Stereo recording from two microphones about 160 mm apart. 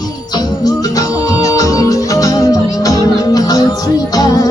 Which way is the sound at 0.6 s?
20° left (ahead or behind).